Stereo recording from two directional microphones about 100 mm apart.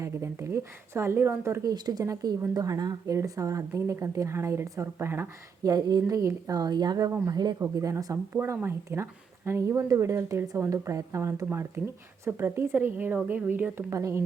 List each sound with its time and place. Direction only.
0.0 s speech: 25° right (ahead or behind)
1.6 s speech: 45° right (ahead or behind); by 5.7 s 25° right (ahead or behind)
5.7 s speech: 35° right (ahead or behind); by 13.8 s 20° right (ahead or behind)
13.9 s speech: 30° right (ahead or behind)